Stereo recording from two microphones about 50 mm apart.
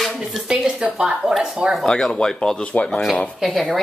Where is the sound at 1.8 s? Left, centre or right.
Centre.